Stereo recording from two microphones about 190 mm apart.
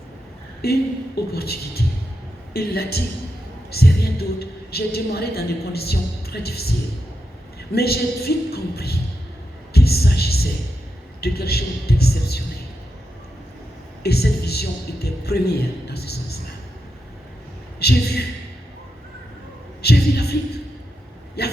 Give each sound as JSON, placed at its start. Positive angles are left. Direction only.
{"t": 0.6, "sound": "a woman's voice", "side_deg": 55}
{"t": 7.7, "sound": "a woman's voice", "side_deg": 55}
{"t": 9.7, "sound": "a sound", "side_deg": 55}
{"t": 14.0, "sound": "a woman's voice", "side_deg": 55}
{"t": 17.7, "sound": "a woman's voice", "side_deg": 55}
{"t": 19.8, "sound": "a sound", "side_deg": 55}
{"t": 21.4, "sound": "hiccup", "side_deg": 55}